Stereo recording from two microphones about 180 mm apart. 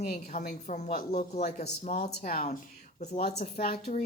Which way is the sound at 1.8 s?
50° left (ahead or behind).